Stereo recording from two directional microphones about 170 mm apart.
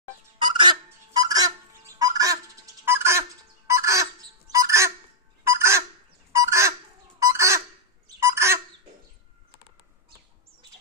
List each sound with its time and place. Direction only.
0.4 s fowl: 25° right (ahead or behind)
8.2 s bird: 15° right (ahead or behind)